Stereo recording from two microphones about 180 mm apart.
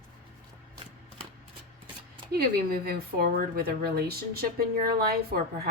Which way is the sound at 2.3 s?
55° right (ahead or behind).